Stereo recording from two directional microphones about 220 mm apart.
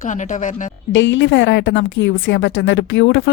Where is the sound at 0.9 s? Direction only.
55° left (ahead or behind).